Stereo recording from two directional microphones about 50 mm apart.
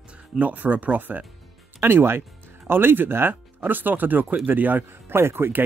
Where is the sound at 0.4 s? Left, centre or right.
Right.